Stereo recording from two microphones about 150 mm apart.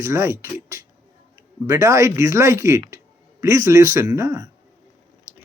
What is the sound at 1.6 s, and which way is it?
Speech, 20° right (ahead or behind).